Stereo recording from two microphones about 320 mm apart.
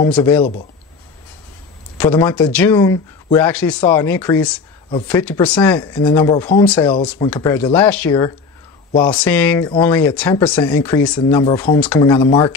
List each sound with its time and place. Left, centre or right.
0.0 s speech: centre
2.0 s speech: centre